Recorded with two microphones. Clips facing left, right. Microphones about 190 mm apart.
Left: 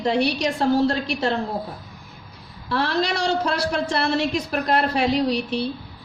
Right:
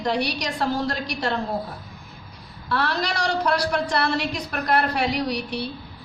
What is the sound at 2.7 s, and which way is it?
A woman's voice, 25° left (ahead or behind).